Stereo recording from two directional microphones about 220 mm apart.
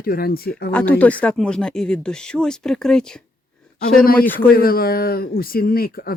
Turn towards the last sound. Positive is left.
turn(degrees=40)  # may be behind; listen again after turning